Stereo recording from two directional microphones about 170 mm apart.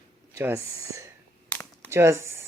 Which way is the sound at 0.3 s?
15° right (ahead or behind).